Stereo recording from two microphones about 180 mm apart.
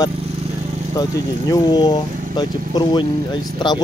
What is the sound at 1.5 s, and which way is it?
Speech, 25° left (ahead or behind).